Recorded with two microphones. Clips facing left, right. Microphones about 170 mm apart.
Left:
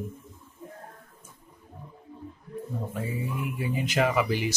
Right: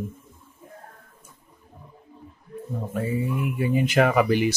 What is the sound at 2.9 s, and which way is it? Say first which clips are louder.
Speech: right 8 dB; 65° right (ahead or behind).